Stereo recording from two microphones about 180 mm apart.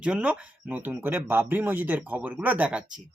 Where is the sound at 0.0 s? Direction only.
5° right (ahead or behind).